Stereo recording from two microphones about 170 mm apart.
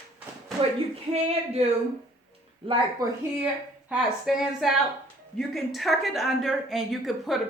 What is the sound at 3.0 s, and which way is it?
Speech, 25° right (ahead or behind).